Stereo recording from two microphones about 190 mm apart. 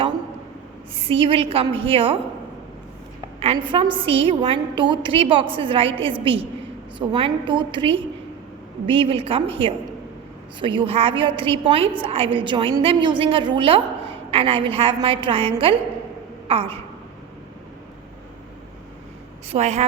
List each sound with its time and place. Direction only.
0.9 s a woman's voice: 30° right (ahead or behind)
3.4 s a woman's voice: 30° right (ahead or behind)
19.5 s a woman's voice: 35° right (ahead or behind)